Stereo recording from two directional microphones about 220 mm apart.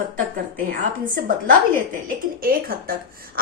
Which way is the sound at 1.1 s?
40° right (ahead or behind).